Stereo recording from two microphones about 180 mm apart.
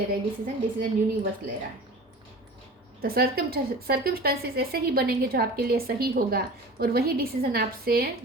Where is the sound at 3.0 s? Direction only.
55° right (ahead or behind).